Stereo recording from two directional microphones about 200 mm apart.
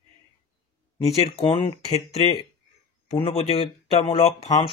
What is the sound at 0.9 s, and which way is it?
Speech, 30° left (ahead or behind).